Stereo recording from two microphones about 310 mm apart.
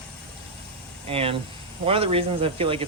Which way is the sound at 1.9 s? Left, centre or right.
Centre.